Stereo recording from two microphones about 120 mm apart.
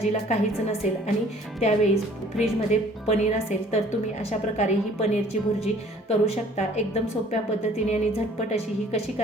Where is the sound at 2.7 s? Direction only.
70° left (ahead or behind).